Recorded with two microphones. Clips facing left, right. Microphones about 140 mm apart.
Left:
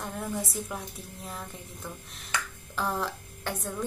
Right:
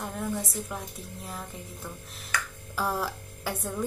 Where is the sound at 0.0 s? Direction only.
Centre (ahead or behind).